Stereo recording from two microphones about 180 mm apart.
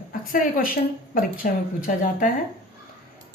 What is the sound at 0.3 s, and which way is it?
A woman's voice, 50° left (ahead or behind).